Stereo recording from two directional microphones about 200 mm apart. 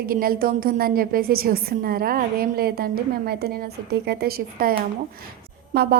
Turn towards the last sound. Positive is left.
turn(degrees=-55)  # may be behind; listen again after turning